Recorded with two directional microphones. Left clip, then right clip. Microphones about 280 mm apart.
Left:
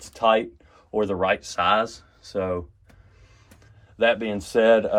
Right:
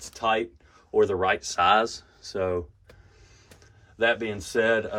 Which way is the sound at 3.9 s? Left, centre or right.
Centre.